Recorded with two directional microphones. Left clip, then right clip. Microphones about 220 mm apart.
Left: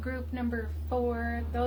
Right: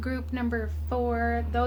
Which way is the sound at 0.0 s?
45° right (ahead or behind).